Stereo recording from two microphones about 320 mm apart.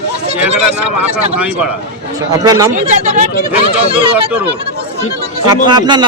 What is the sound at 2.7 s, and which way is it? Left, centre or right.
Speech, right.